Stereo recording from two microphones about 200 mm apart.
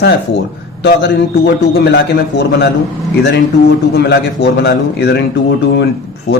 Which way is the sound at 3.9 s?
55° left (ahead or behind).